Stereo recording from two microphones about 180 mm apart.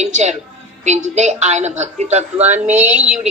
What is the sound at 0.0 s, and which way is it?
A man's voice, 40° right (ahead or behind).